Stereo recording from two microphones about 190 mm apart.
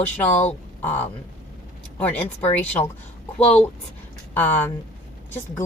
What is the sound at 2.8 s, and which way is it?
Speech, 20° left (ahead or behind).